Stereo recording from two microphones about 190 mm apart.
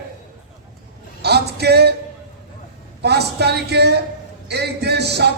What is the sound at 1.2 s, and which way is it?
Music, 60° right (ahead or behind).